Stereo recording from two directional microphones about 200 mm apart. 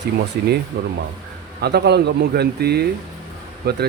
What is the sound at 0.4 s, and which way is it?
Speech, 55° right (ahead or behind).